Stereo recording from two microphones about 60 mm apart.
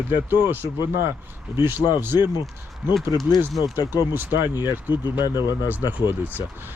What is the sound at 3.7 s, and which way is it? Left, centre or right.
Speech, right.